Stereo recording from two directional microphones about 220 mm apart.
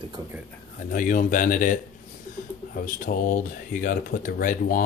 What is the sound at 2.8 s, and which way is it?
Speech, 40° left (ahead or behind).